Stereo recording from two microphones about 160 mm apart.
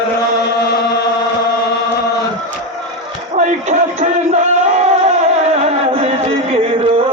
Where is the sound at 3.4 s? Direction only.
50° right (ahead or behind).